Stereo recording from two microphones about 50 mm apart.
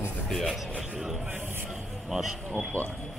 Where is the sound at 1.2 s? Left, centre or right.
Right.